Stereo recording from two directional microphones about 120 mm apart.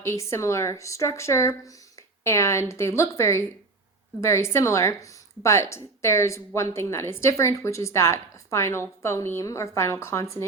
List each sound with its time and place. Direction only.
0.0 s a woman's voice: 25° left (ahead or behind)